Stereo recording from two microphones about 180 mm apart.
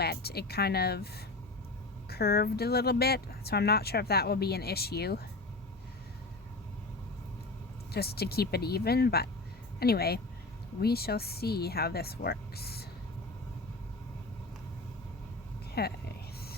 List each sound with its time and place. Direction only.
0.0 s speech: 60° left (ahead or behind)
7.9 s speech: 60° left (ahead or behind)
15.8 s speech: 60° left (ahead or behind)